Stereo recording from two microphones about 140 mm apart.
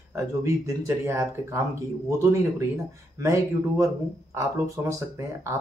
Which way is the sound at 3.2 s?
20° right (ahead or behind).